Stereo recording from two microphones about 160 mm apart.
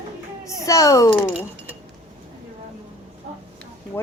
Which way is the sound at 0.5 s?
20° left (ahead or behind).